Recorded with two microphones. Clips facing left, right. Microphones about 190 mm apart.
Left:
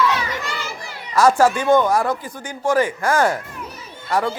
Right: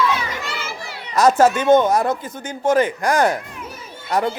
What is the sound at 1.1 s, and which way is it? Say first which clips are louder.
Speech: right 1 dB; 20° right (ahead or behind).